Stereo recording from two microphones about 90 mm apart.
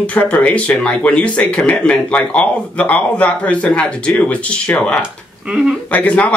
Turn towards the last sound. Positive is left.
turn(degrees=15)  # may be behind; listen again after turning